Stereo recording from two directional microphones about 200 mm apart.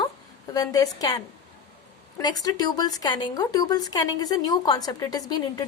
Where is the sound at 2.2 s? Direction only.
20° left (ahead or behind).